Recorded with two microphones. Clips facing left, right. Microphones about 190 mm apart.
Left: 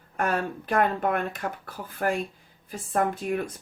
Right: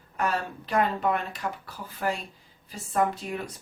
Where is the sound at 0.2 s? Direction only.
50° left (ahead or behind).